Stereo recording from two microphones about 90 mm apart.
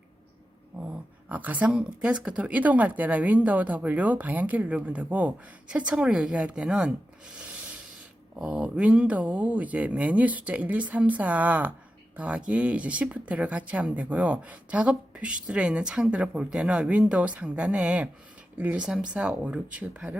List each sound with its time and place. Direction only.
1.3 s speech: 15° right (ahead or behind)